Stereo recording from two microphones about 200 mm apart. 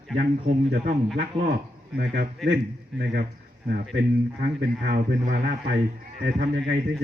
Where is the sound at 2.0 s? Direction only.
55° right (ahead or behind).